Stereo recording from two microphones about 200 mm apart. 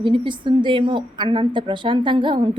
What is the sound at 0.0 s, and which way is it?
A woman's voice, 25° right (ahead or behind).